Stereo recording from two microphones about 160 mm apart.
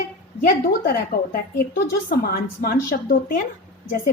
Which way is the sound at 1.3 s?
65° left (ahead or behind).